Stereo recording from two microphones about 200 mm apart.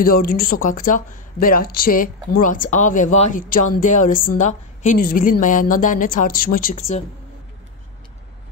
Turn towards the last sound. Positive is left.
turn(degrees=45)  # may be behind; listen again after turning